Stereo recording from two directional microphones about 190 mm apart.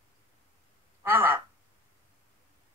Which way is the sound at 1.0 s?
10° right (ahead or behind).